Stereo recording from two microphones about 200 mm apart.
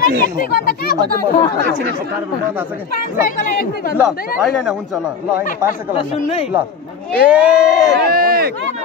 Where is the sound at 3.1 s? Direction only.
45° left (ahead or behind).